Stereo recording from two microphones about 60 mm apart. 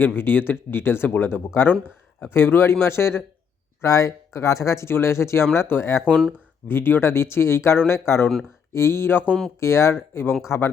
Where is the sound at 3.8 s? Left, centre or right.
Left.